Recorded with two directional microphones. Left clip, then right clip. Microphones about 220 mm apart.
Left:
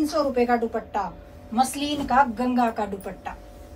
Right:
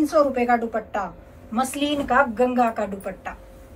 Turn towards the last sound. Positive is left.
turn(degrees=0)  # may be behind; listen again after turning